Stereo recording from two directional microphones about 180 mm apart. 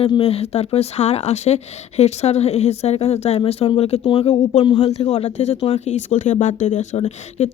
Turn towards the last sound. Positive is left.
turn(degrees=35)  # may be behind; listen again after turning